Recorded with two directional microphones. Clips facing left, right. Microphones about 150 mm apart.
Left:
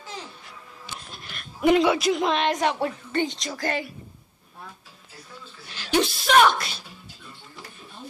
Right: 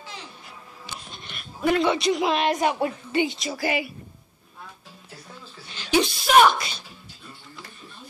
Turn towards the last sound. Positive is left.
turn(degrees=0)  # may be behind; listen again after turning